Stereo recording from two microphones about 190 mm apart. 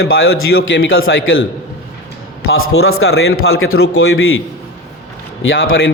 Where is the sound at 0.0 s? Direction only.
90° left.